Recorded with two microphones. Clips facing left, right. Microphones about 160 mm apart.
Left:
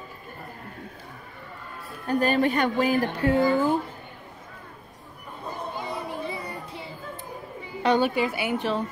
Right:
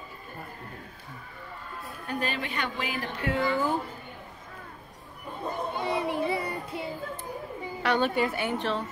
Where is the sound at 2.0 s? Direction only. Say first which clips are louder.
Left 10 dB; 45° left (ahead or behind).